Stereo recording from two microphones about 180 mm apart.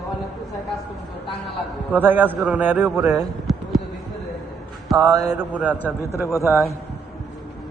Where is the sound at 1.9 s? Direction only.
10° right (ahead or behind).